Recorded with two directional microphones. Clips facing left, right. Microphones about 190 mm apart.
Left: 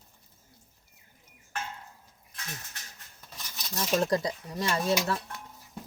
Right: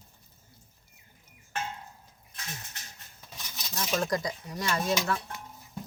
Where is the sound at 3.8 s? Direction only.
35° left (ahead or behind).